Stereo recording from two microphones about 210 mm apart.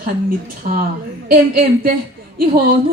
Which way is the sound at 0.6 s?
40° right (ahead or behind).